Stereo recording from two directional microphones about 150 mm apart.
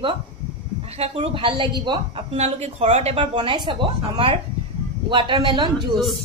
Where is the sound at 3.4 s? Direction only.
30° right (ahead or behind).